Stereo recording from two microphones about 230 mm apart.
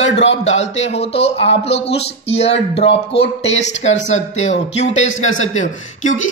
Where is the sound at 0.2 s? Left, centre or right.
Left.